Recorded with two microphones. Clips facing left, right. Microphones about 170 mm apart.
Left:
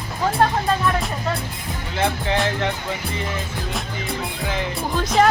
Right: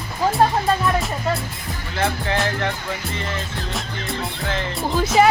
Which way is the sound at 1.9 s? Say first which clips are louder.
Left 1 dB; 20° left (ahead or behind).